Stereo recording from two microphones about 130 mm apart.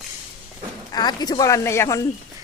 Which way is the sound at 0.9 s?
30° left (ahead or behind).